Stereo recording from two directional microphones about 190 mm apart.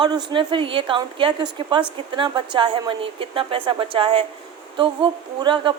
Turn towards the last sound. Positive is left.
turn(degrees=-25)  # may be behind; listen again after turning